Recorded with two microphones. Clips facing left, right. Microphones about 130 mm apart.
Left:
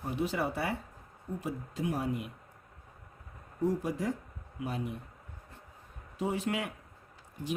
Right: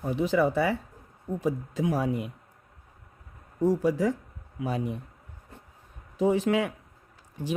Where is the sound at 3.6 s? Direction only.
90° right.